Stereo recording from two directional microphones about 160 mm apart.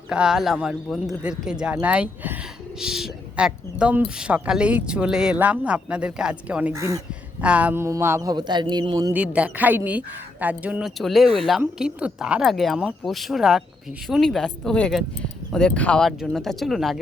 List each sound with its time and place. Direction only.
0.1 s speech: 5° right (ahead or behind)
6.7 s a man's voice: 20° right (ahead or behind)
9.1 s speech: 5° right (ahead or behind)